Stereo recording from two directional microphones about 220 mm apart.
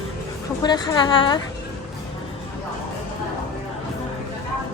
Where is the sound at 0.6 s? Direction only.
20° left (ahead or behind).